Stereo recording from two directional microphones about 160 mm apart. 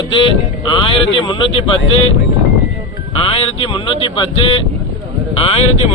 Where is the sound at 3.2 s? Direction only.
35° left (ahead or behind).